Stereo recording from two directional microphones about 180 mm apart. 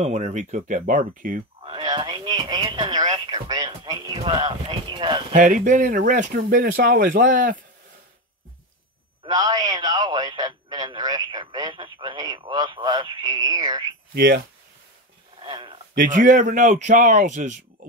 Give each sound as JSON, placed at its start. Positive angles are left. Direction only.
{"t": 0.0, "sound": "speech", "side_deg": -40}
{"t": 1.6, "sound": "radio", "side_deg": -25}
{"t": 5.3, "sound": "speech", "side_deg": -45}
{"t": 9.2, "sound": "a man's voice", "side_deg": -20}
{"t": 14.1, "sound": "speech", "side_deg": -55}
{"t": 15.4, "sound": "a sound", "side_deg": -30}
{"t": 15.9, "sound": "speech", "side_deg": -50}